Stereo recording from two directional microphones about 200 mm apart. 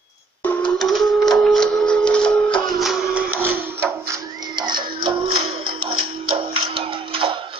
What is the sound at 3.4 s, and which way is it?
Music, 10° right (ahead or behind).